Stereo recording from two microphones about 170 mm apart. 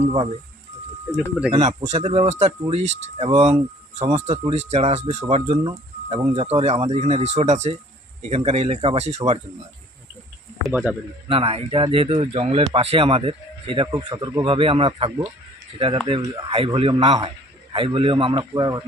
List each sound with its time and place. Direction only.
0.0 s speech: 35° right (ahead or behind)
1.1 s speech: 5° right (ahead or behind)
1.5 s speech: 40° right (ahead or behind)
10.7 s speech: 10° right (ahead or behind)
11.3 s a man's voice: 35° right (ahead or behind)